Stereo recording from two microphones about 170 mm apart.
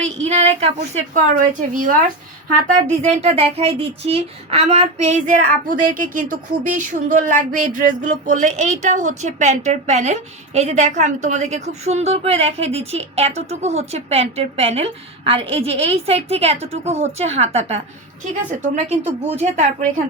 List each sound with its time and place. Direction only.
0.2 s speech: 40° right (ahead or behind)